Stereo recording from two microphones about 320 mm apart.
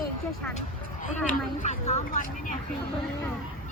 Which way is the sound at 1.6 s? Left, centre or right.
Left.